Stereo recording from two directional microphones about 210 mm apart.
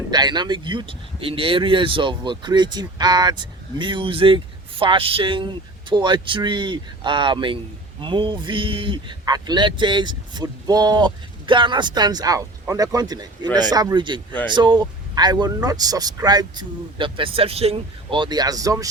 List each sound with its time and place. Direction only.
0.1 s speech: 20° right (ahead or behind)